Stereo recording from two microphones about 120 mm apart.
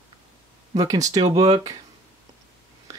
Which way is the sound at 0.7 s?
30° right (ahead or behind).